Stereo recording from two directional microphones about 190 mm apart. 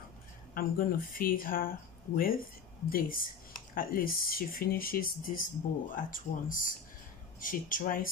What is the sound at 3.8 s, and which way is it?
Speech, 50° left (ahead or behind).